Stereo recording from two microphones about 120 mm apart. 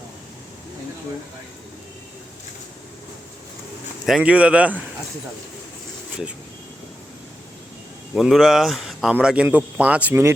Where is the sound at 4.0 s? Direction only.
5° right (ahead or behind).